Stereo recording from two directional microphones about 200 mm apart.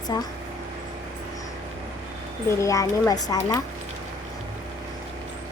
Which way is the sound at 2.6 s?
15° left (ahead or behind).